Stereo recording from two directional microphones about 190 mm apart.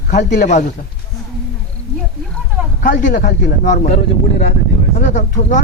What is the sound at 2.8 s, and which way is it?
Speech, 45° left (ahead or behind).